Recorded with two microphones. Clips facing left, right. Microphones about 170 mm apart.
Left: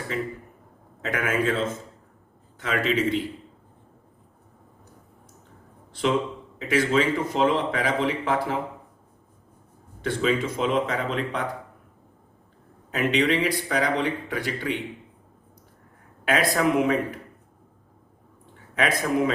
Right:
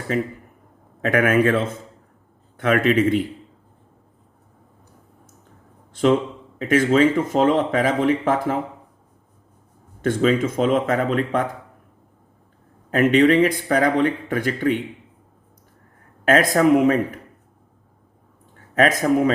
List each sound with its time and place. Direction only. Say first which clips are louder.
1.0 s a man's voice: right 8 dB; 60° right (ahead or behind)
5.9 s a man's voice: right 6 dB; 50° right (ahead or behind)
10.0 s speech: right 6 dB; 45° right (ahead or behind)
12.9 s speech: right 8 dB; 50° right (ahead or behind)
16.2 s speech: right 6 dB; 45° right (ahead or behind)
18.7 s speech: right 6 dB; 45° right (ahead or behind)